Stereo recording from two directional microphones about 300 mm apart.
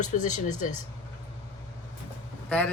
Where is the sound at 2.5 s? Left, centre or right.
Centre.